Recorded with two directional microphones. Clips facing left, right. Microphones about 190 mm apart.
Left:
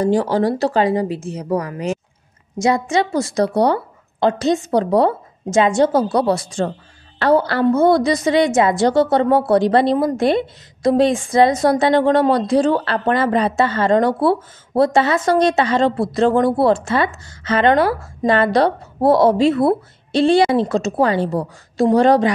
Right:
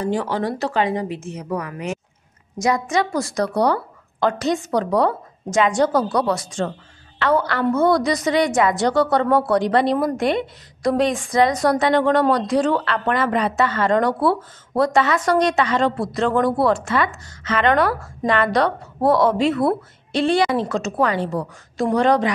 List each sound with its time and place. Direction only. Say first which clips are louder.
0.0 s a woman's voice: left 6 dB; 35° left (ahead or behind)